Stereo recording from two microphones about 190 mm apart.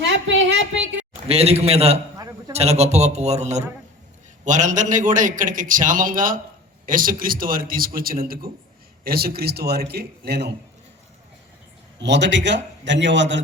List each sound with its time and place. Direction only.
0.0 s a woman's voice: 75° right (ahead or behind)
1.3 s a man's voice: 30° right (ahead or behind); by 10.5 s 60° right (ahead or behind)
11.9 s a man's voice: 65° right (ahead or behind)